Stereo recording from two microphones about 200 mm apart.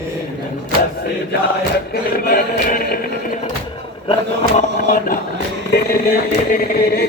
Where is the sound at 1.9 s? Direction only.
50° left (ahead or behind).